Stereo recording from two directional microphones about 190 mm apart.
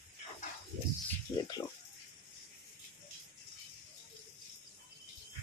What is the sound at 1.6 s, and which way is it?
Speech, 15° left (ahead or behind).